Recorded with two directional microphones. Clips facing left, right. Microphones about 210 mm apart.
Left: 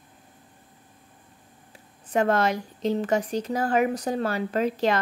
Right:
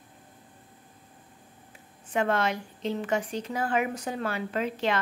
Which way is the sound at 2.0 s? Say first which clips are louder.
Left 4 dB; 40° left (ahead or behind).